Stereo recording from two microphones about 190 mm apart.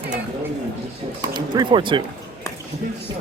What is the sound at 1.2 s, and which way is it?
Speech, 25° right (ahead or behind).